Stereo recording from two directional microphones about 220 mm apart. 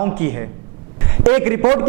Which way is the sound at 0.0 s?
15° right (ahead or behind).